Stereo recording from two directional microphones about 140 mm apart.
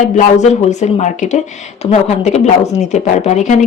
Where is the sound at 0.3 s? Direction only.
60° left (ahead or behind).